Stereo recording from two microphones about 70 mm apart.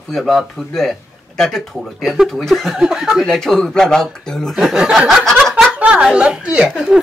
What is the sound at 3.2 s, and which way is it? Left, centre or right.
Speech, centre.